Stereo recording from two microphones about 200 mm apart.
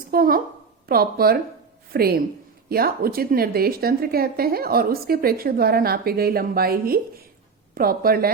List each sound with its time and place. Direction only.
0.1 s a woman's voice: 45° right (ahead or behind)